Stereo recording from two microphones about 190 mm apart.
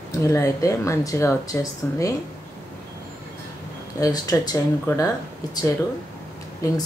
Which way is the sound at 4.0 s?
20° left (ahead or behind).